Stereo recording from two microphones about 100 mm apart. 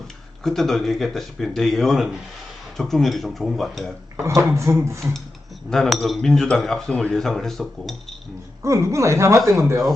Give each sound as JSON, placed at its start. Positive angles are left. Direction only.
{"t": 0.4, "sound": "speech", "side_deg": 5}
{"t": 4.4, "sound": "speech", "side_deg": -30}
{"t": 5.7, "sound": "speech", "side_deg": 5}
{"t": 8.6, "sound": "speech", "side_deg": -30}